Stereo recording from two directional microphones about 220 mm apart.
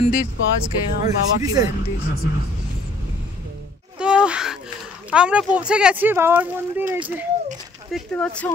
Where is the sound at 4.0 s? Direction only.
5° right (ahead or behind).